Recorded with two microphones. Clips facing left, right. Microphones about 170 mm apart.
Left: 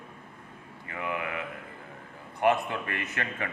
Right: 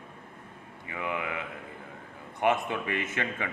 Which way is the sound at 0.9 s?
20° right (ahead or behind).